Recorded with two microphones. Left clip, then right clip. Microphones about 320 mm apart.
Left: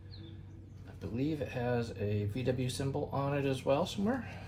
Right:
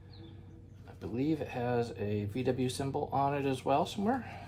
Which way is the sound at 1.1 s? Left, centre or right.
Right.